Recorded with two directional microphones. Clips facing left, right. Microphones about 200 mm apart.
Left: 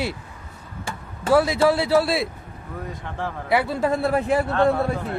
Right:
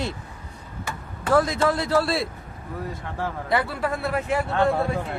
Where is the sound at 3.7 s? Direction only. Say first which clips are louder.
Left 5 dB; 25° left (ahead or behind).